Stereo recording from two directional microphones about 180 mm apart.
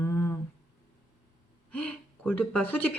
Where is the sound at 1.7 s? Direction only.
5° left (ahead or behind).